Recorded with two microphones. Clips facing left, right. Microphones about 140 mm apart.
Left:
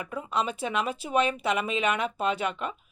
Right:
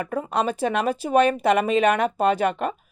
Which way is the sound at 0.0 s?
50° right (ahead or behind).